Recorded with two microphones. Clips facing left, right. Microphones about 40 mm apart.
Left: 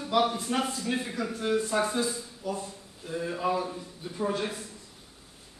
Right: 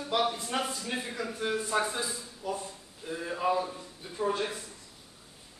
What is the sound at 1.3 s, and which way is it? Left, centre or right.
A man's voice, centre.